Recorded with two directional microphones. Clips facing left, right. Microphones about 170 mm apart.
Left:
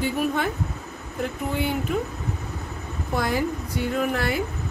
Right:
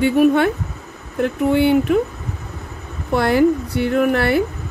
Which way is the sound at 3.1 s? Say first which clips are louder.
Right 10 dB; 70° right (ahead or behind).